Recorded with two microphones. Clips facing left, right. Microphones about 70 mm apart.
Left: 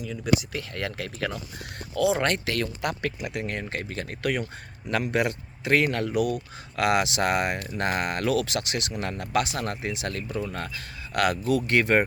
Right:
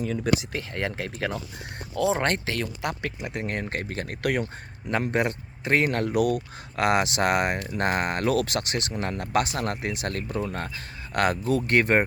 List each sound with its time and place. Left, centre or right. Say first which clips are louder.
0.3 s speech: right 1 dB; right
2.5 s speech: left 1 dB; centre
3.5 s speech: right 2 dB; right
5.0 s speech: even; right